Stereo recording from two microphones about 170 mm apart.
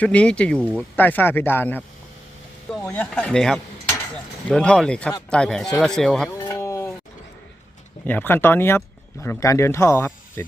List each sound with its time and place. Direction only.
0.0 s speech: 5° left (ahead or behind)
6.4 s sheep: 20° left (ahead or behind)
8.0 s speech: 10° left (ahead or behind)